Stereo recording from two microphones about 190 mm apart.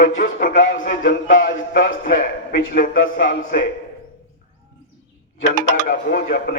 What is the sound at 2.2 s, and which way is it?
Speech, 50° left (ahead or behind).